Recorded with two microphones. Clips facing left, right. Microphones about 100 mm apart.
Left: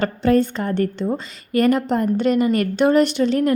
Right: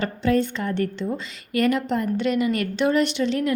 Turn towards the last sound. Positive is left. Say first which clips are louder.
# left 5 dB
turn(degrees=45)  # may be behind; listen again after turning